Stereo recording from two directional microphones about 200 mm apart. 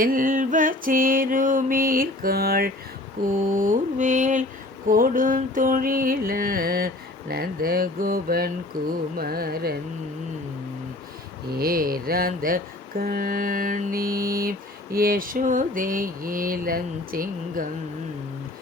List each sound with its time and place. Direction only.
0.0 s music: 45° right (ahead or behind)
3.6 s mantra: 40° right (ahead or behind)
4.9 s music: 45° right (ahead or behind)
11.5 s music: 45° right (ahead or behind)